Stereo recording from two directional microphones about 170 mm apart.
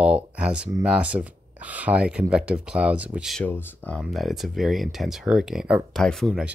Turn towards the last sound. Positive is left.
turn(degrees=0)  # may be behind; listen again after turning